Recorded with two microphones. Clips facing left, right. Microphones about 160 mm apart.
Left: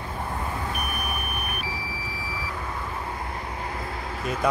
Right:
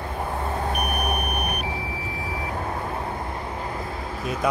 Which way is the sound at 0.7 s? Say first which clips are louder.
Right 5 dB; 65° right (ahead or behind).